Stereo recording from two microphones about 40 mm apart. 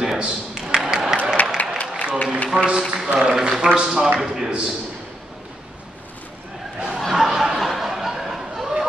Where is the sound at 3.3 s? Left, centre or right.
Centre.